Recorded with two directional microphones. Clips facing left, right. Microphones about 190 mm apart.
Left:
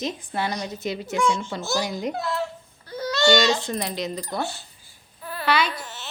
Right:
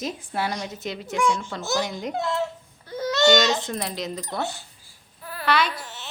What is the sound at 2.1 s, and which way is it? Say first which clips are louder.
Speech: right 2 dB; 25° right (ahead or behind).